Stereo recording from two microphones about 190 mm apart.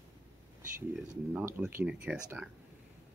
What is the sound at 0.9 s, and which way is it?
Speech, 5° right (ahead or behind).